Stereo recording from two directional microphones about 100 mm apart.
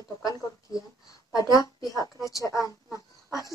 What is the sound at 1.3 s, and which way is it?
A woman's voice, 40° left (ahead or behind).